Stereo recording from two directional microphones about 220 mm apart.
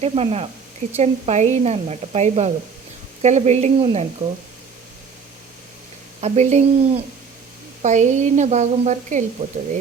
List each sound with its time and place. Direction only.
0.0 s a woman's voice: 30° right (ahead or behind)
6.1 s a woman's voice: 30° right (ahead or behind)